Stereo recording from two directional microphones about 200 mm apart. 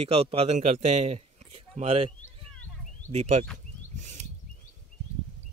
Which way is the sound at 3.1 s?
35° right (ahead or behind).